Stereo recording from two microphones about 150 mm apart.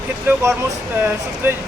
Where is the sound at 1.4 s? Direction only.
15° right (ahead or behind).